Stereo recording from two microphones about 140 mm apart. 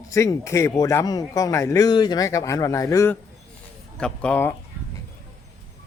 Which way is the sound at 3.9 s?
5° left (ahead or behind).